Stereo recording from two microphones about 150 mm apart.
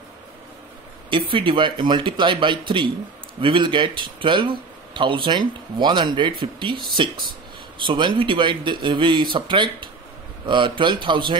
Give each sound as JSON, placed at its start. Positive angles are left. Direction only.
{"t": 1.3, "sound": "speech", "side_deg": -35}
{"t": 7.8, "sound": "speech", "side_deg": -35}